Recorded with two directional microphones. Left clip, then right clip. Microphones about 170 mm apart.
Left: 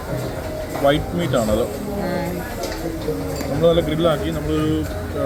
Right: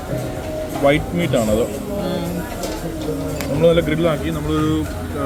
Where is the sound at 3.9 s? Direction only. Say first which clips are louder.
Even; 30° right (ahead or behind).